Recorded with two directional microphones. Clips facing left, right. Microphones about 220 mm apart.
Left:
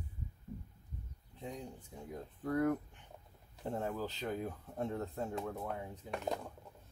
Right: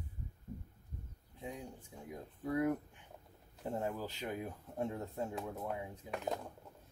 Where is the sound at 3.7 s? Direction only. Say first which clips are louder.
Left 1 dB; 10° right (ahead or behind).